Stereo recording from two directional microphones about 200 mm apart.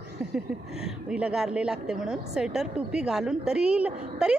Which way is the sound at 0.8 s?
5° right (ahead or behind).